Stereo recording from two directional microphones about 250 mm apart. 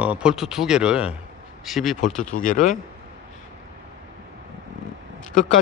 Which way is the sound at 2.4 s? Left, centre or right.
Left.